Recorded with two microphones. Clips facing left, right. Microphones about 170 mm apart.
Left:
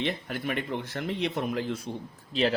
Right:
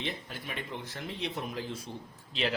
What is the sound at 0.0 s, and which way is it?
Speech, 65° left (ahead or behind).